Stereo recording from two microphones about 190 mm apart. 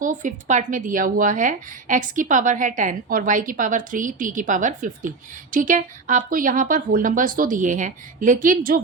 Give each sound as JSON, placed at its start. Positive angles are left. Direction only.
{"t": 0.0, "sound": "a woman's voice", "side_deg": -40}